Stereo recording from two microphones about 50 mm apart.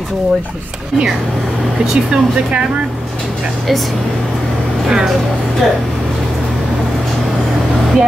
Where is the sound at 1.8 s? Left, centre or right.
Centre.